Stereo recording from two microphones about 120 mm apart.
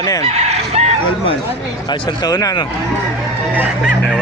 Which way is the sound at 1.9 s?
35° left (ahead or behind).